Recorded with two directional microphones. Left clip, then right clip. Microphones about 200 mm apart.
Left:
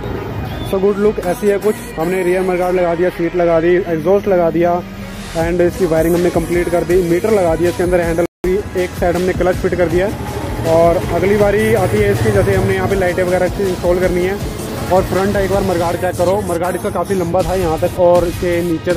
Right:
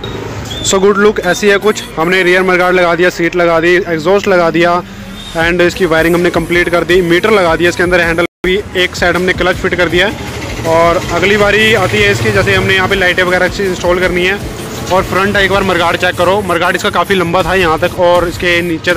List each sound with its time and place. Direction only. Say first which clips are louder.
1.4 s a man's voice: right 4 dB; 10° right (ahead or behind)
16.2 s a man's voice: right 4 dB; 15° right (ahead or behind)
16.5 s speech: right 6 dB; 5° right (ahead or behind)
16.9 s a man's voice: right 5 dB; 15° right (ahead or behind)